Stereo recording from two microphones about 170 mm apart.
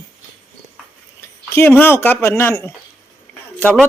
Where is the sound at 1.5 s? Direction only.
15° left (ahead or behind).